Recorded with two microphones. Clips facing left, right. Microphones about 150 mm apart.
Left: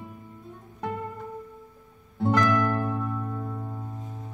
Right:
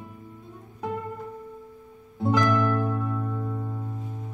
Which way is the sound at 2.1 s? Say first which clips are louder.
Even; centre (ahead or behind).